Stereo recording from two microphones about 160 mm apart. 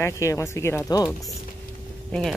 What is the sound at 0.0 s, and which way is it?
Speech, 20° left (ahead or behind).